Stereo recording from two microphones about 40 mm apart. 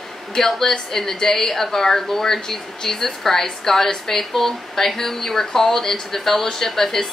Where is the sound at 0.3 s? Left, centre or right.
Centre.